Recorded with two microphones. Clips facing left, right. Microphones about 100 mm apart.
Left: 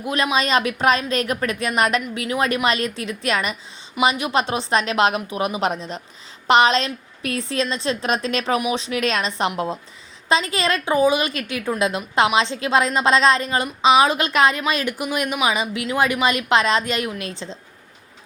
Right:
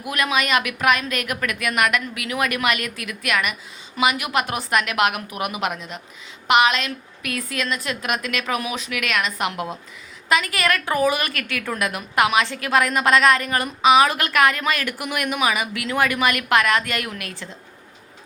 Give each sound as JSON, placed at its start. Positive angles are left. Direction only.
{"t": 0.0, "sound": "a woman's voice", "side_deg": 25}